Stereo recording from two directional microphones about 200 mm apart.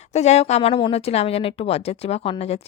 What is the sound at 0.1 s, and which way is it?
A woman's voice, 35° left (ahead or behind).